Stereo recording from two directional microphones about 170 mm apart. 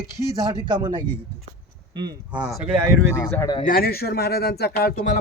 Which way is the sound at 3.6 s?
60° left (ahead or behind).